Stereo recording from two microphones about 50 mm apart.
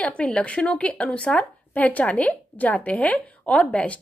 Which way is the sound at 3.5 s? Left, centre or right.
Left.